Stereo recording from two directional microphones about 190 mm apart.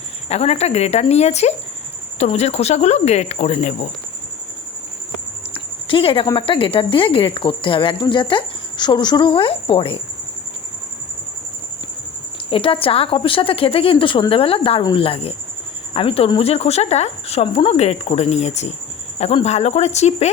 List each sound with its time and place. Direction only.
0.3 s speech: 35° left (ahead or behind)
5.5 s speech: 30° left (ahead or behind)
12.5 s speech: 30° left (ahead or behind)